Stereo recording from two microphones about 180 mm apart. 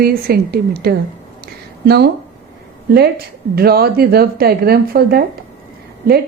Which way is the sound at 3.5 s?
60° right (ahead or behind).